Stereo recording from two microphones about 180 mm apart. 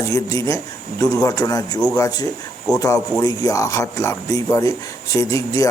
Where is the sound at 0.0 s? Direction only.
15° left (ahead or behind).